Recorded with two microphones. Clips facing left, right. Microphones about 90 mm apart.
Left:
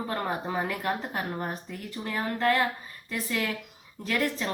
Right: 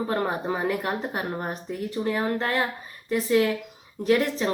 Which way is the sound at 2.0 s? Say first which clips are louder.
Right 1 dB; 25° right (ahead or behind).